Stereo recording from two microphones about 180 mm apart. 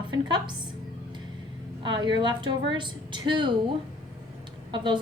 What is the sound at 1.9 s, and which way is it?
Speech, 25° right (ahead or behind).